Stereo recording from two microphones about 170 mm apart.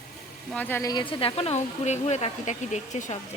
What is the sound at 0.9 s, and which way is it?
Speech, 30° left (ahead or behind).